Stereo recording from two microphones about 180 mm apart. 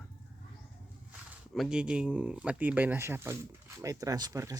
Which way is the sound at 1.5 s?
5° right (ahead or behind).